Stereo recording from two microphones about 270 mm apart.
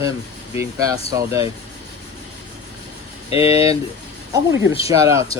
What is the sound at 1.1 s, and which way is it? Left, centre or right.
Speech, centre.